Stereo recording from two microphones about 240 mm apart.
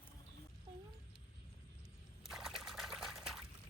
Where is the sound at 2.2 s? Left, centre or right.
Centre.